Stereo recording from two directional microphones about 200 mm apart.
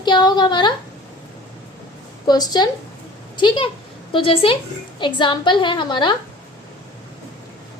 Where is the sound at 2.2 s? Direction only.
20° left (ahead or behind).